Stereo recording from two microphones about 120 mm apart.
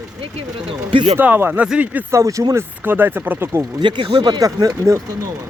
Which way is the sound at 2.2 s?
25° right (ahead or behind).